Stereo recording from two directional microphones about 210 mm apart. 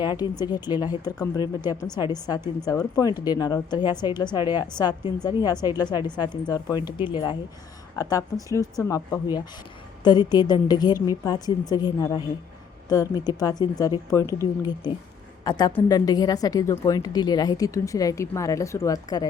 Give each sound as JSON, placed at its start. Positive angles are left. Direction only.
{"t": 0.0, "sound": "a woman's voice", "side_deg": 20}